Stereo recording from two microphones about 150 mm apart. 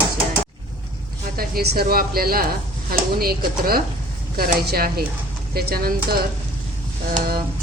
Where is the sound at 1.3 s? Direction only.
85° right.